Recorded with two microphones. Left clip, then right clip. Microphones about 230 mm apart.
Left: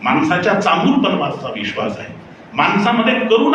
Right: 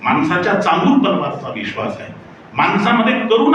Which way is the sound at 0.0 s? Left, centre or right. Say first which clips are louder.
Left 1 dB; right.